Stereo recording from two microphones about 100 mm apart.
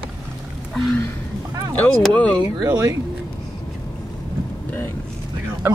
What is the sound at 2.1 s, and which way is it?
Speech, 15° left (ahead or behind).